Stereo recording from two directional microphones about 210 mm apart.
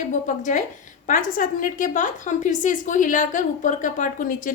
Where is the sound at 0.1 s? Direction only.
40° left (ahead or behind).